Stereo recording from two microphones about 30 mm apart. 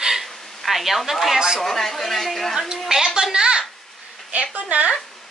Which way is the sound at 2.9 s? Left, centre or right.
Centre.